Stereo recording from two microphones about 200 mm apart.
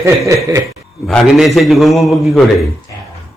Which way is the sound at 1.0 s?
Centre (ahead or behind).